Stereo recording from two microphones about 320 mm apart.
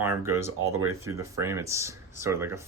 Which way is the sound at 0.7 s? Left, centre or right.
Right.